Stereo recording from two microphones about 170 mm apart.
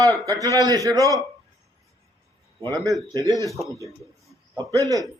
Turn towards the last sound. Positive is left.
turn(degrees=-20)  # may be behind; listen again after turning